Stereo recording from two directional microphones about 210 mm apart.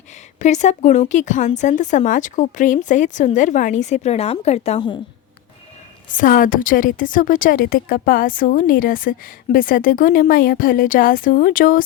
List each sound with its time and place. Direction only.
0.3 s a woman's voice: 35° left (ahead or behind)
6.1 s a woman's voice: 40° left (ahead or behind)